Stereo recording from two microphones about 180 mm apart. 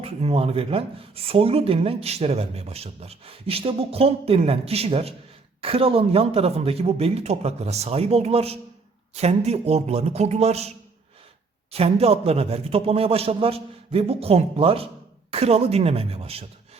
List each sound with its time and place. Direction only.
0.0 s speech: 35° right (ahead or behind)